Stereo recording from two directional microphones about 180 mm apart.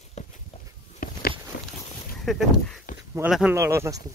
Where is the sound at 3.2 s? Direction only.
5° right (ahead or behind).